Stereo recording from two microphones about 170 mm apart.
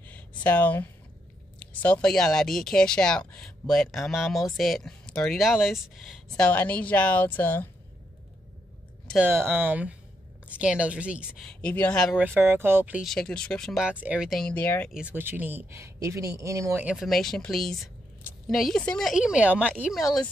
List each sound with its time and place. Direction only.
0.0 s a sound: 10° left (ahead or behind)
1.6 s speech: 10° left (ahead or behind)
9.0 s a sound: centre (ahead or behind)
9.3 s speech: 15° right (ahead or behind)
11.4 s speech: 10° left (ahead or behind)
12.2 s speech: 15° right (ahead or behind); by 14.9 s 10° left (ahead or behind)
14.9 s speech: 5° right (ahead or behind)
16.8 s speech: centre (ahead or behind)